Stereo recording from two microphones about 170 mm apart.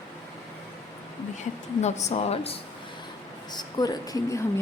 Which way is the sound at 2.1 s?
35° left (ahead or behind).